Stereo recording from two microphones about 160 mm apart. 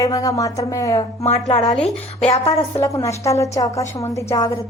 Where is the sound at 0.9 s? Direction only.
45° left (ahead or behind).